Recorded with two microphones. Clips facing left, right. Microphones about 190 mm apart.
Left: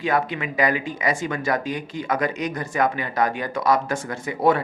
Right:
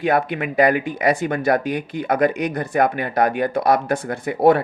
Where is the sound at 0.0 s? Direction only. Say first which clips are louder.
Right 4 dB; 60° right (ahead or behind).